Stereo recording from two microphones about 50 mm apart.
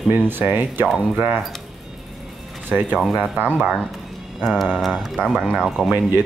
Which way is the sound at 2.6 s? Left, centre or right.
Right.